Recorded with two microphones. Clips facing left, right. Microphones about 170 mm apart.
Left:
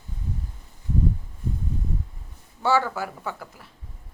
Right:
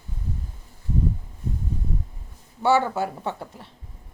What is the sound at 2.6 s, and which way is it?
Speech, 20° right (ahead or behind).